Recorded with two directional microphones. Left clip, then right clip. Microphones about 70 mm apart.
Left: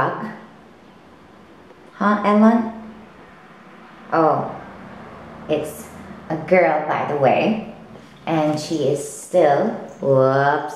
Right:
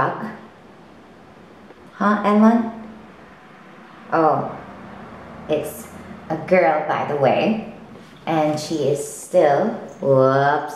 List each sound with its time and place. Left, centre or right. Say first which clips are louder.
0.0 s a woman's voice: even; centre
2.0 s a woman's voice: left 1 dB; centre
4.1 s a woman's voice: even; centre
5.5 s a woman's voice: even; centre